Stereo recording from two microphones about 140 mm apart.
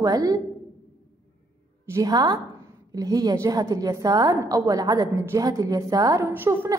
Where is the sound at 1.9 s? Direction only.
25° right (ahead or behind).